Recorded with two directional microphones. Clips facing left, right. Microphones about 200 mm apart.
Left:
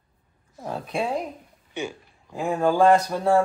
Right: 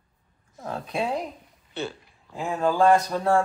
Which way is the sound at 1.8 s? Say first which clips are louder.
Left 1 dB; 15° left (ahead or behind).